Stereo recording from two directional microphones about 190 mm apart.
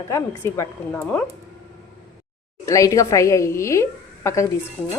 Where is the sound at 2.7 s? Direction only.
15° left (ahead or behind).